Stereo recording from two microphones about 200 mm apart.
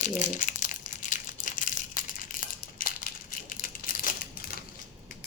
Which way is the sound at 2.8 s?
45° left (ahead or behind).